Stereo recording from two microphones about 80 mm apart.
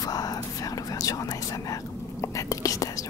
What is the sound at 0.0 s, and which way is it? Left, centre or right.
Whispering, left.